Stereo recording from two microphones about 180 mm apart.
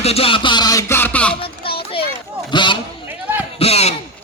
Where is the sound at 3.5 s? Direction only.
35° left (ahead or behind).